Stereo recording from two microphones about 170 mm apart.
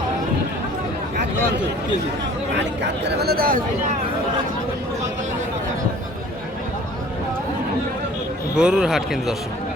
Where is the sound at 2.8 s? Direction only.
80° right; by 3.6 s 60° right (ahead or behind).